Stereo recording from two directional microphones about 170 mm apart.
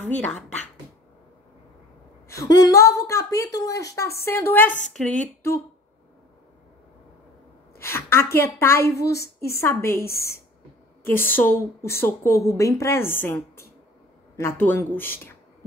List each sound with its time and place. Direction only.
0.2 s speech: centre (ahead or behind)
2.2 s a woman's voice: 20° left (ahead or behind)
7.8 s a sound: 15° left (ahead or behind)
8.4 s a woman's voice: 15° left (ahead or behind)